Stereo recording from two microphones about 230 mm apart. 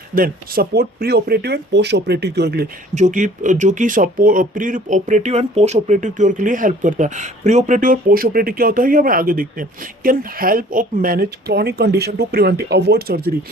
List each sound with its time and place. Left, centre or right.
0.1 s speech: right
2.9 s speech: right